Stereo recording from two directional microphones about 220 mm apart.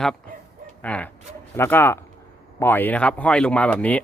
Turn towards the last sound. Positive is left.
turn(degrees=5)  # may be behind; listen again after turning